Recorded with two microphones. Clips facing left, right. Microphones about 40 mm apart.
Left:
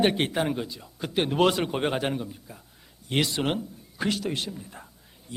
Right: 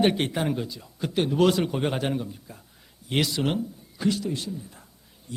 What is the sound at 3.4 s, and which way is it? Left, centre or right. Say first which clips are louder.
Speech: right 1 dB; centre.